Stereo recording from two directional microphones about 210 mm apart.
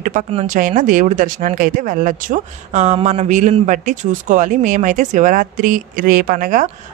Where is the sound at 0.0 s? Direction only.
30° right (ahead or behind).